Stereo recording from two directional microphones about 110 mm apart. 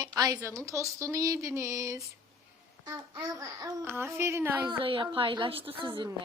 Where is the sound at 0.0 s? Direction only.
35° right (ahead or behind); by 4.7 s 20° right (ahead or behind).